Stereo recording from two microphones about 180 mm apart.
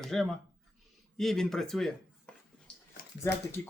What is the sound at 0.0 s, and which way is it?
Speech, centre (ahead or behind).